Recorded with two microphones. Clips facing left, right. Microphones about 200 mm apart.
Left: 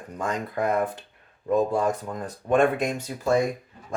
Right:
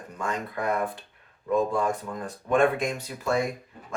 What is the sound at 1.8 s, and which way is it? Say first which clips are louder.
Speech: left 2 dB; 40° left (ahead or behind).